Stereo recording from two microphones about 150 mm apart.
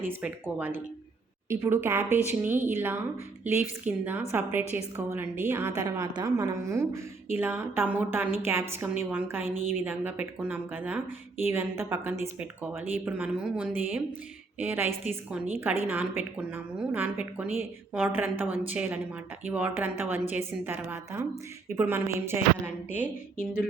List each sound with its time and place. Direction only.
0.0 s a woman's voice: 10° right (ahead or behind)
22.4 s a woman's voice: 45° left (ahead or behind)